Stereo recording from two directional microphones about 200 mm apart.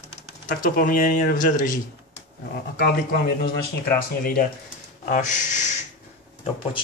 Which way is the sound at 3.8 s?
45° left (ahead or behind).